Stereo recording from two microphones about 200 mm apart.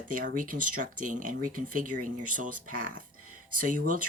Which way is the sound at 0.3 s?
40° right (ahead or behind).